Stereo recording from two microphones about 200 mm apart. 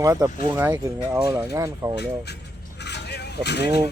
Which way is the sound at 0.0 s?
15° right (ahead or behind).